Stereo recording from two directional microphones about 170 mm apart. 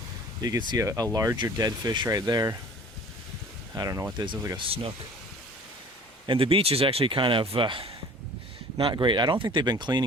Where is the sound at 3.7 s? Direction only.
20° right (ahead or behind).